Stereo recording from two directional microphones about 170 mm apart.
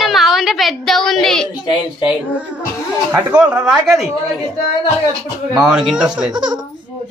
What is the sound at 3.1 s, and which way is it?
Speech, 5° right (ahead or behind).